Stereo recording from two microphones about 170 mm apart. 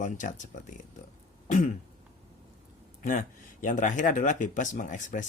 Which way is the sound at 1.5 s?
50° left (ahead or behind).